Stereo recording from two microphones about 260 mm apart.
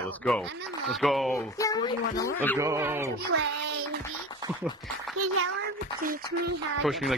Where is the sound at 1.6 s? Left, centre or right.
Centre.